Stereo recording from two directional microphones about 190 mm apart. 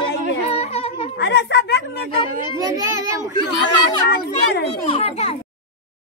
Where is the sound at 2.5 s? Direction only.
20° right (ahead or behind).